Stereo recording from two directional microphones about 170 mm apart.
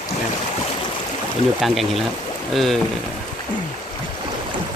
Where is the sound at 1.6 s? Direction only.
Centre (ahead or behind).